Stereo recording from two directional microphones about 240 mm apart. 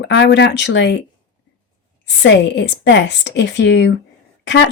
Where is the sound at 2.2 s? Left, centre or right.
Left.